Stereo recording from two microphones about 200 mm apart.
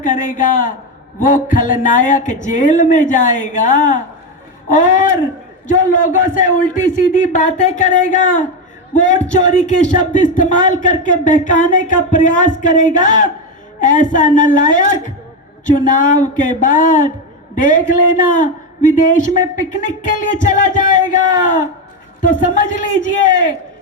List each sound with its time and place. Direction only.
0.0 s a woman's voice: 40° left (ahead or behind)